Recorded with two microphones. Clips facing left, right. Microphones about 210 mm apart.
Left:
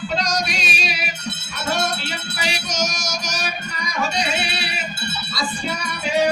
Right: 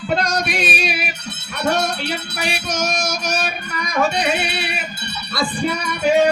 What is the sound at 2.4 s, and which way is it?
Music, 55° right (ahead or behind).